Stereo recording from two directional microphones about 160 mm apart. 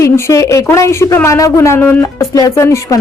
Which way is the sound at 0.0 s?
20° left (ahead or behind).